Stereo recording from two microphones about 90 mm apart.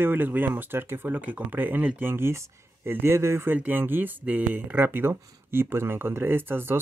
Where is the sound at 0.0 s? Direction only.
20° right (ahead or behind).